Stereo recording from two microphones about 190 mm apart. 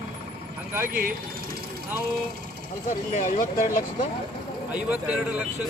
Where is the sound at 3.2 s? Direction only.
45° left (ahead or behind).